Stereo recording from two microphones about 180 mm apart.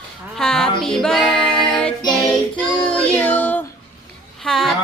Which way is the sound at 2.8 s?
5° left (ahead or behind).